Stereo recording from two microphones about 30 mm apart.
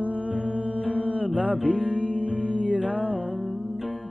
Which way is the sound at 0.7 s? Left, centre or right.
Right.